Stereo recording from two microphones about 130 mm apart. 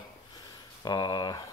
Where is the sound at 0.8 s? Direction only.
30° left (ahead or behind).